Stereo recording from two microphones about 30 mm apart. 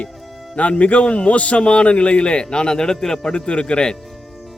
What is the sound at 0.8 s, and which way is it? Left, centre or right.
A man's voice, left.